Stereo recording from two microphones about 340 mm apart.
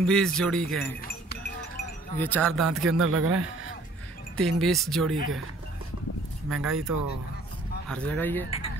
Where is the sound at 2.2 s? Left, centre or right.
Centre.